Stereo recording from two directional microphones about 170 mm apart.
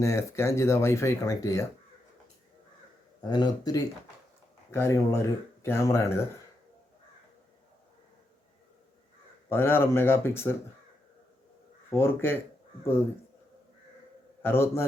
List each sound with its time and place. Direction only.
0.0 s speech: 15° left (ahead or behind)
3.2 s speech: 25° left (ahead or behind)
9.5 s speech: 15° left (ahead or behind)
11.9 s speech: 15° left (ahead or behind)
14.4 s speech: 15° left (ahead or behind)